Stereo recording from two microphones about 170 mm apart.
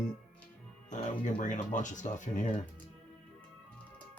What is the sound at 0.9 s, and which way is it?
Speech, 50° left (ahead or behind).